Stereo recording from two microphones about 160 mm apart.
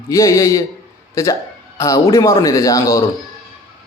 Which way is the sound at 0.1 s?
20° left (ahead or behind).